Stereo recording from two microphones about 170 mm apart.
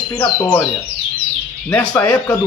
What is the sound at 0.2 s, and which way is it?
Speech, 25° left (ahead or behind).